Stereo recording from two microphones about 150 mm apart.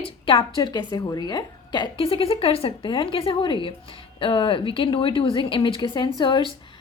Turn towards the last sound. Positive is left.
turn(degrees=30)  # may be behind; listen again after turning